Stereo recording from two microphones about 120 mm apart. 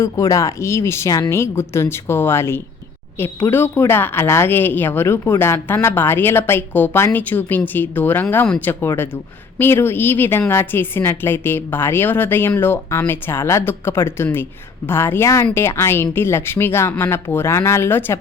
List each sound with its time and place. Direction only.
0.0 s a woman's voice: 25° left (ahead or behind)